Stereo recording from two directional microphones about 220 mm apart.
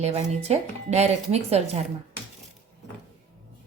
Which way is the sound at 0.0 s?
30° right (ahead or behind).